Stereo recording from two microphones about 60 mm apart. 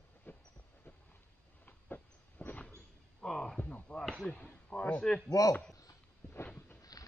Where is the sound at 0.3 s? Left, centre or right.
Left.